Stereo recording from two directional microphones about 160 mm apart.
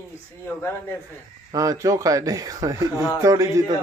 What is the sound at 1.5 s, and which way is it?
Speech, 20° right (ahead or behind).